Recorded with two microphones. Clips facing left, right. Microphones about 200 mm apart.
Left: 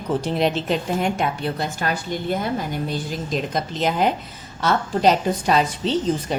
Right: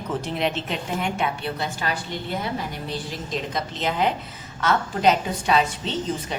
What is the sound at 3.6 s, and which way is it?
A woman's voice, 45° left (ahead or behind).